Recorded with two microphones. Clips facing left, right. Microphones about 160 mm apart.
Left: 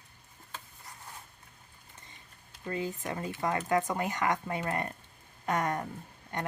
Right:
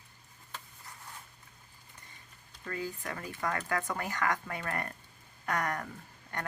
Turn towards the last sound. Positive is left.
turn(degrees=20)  # may be behind; listen again after turning